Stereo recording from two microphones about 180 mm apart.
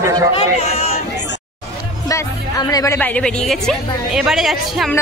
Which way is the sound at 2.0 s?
20° left (ahead or behind).